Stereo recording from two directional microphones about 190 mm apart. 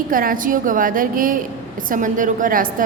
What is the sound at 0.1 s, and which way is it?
A woman's voice, 45° right (ahead or behind).